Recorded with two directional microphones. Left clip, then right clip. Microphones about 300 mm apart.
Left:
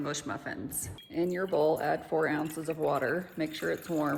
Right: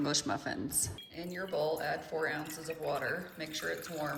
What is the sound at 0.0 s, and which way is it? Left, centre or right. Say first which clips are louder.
Speech: right 2 dB; centre.